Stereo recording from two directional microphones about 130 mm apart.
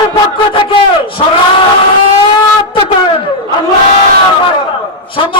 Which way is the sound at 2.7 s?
40° left (ahead or behind).